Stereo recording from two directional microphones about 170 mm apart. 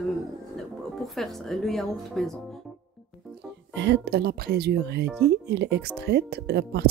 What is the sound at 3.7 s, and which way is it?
Speech, 85° right.